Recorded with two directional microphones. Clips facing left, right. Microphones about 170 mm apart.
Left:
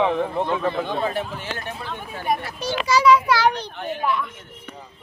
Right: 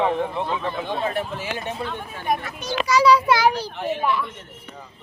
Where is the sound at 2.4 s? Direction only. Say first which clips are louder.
Even; 30° left (ahead or behind).